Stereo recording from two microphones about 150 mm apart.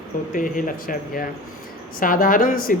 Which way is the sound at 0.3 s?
65° left (ahead or behind).